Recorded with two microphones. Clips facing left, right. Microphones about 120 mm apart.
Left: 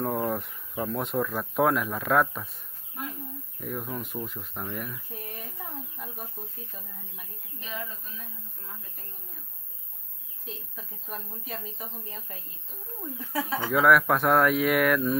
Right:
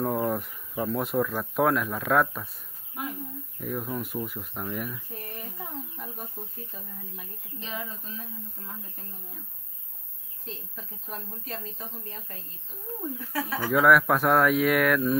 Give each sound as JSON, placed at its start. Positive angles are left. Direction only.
{"t": 0.0, "sound": "speech", "side_deg": 0}
{"t": 3.5, "sound": "speech", "side_deg": 0}
{"t": 5.9, "sound": "chicken", "side_deg": 0}
{"t": 10.4, "sound": "speech", "side_deg": 5}
{"t": 11.6, "sound": "a woman's voice", "side_deg": 10}
{"t": 13.7, "sound": "speech", "side_deg": 0}